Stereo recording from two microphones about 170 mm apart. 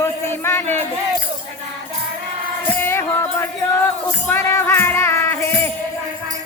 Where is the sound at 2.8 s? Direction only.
15° left (ahead or behind).